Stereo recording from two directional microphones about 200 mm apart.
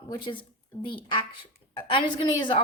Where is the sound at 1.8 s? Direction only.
25° left (ahead or behind).